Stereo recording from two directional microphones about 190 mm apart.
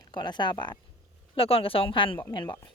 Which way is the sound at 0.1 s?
25° left (ahead or behind).